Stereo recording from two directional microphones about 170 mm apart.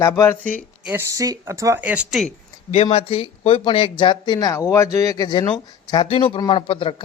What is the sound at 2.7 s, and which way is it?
Speech, 35° left (ahead or behind).